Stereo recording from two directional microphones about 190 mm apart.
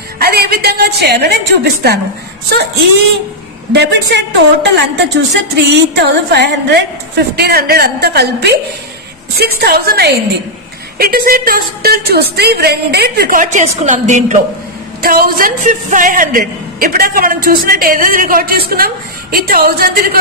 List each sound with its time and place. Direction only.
0.2 s speech: 55° right (ahead or behind)
3.7 s a man's voice: 65° right (ahead or behind); by 14.4 s 40° right (ahead or behind)
15.0 s a man's voice: 50° right (ahead or behind)